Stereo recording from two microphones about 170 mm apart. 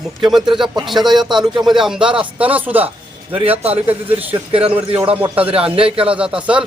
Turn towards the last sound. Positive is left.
turn(degrees=-5)  # may be behind; listen again after turning